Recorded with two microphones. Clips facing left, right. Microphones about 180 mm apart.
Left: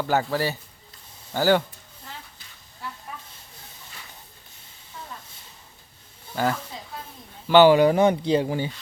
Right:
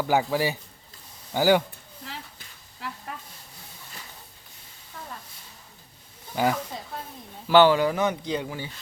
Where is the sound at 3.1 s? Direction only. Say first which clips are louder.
Right 1 dB; 90° right.